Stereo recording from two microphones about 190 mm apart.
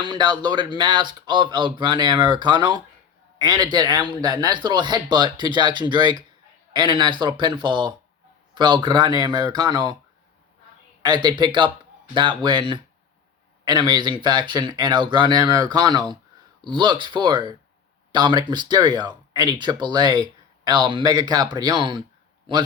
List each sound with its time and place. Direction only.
0.0 s speech: 20° right (ahead or behind)
11.0 s speech: 20° right (ahead or behind)